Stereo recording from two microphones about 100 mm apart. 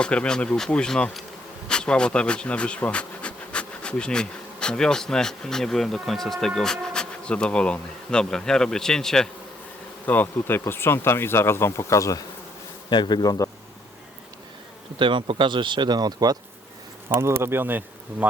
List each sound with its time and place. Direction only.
0.0 s speech: 10° left (ahead or behind)
1.6 s bee: 10° left (ahead or behind)
10.1 s speech: 20° left (ahead or behind)
12.9 s a man's voice: 50° left (ahead or behind)
14.9 s speech: 55° right (ahead or behind)
17.1 s speech: 25° right (ahead or behind)